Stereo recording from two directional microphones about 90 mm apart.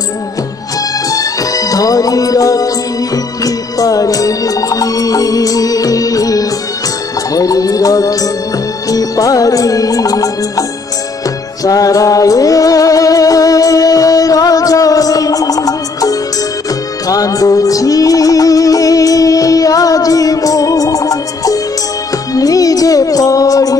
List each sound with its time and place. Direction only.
1.1 s music: 40° left (ahead or behind)
11.6 s music: 40° left (ahead or behind)